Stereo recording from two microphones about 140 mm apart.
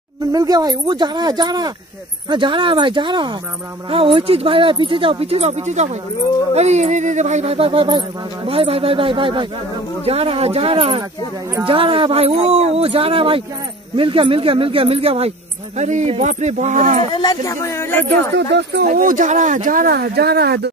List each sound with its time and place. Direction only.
0.3 s speech: 25° right (ahead or behind); by 15.3 s 45° right (ahead or behind)
15.8 s speech: 55° right (ahead or behind)
17.1 s speech: 30° left (ahead or behind)
18.9 s speech: 80° right